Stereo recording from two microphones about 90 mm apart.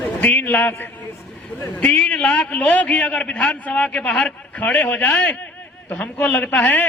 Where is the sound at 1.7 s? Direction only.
15° left (ahead or behind).